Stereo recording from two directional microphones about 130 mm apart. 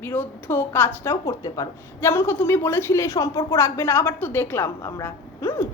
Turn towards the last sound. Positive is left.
turn(degrees=20)  # may be behind; listen again after turning